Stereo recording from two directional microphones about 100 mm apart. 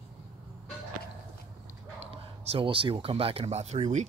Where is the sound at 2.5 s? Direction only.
60° right (ahead or behind); by 3.8 s 90° right.